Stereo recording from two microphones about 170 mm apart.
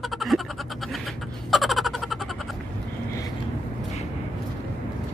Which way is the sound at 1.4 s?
Centre (ahead or behind).